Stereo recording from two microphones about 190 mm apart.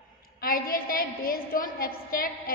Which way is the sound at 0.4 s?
50° left (ahead or behind).